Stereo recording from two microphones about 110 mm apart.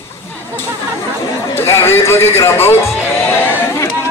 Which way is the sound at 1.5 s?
20° left (ahead or behind).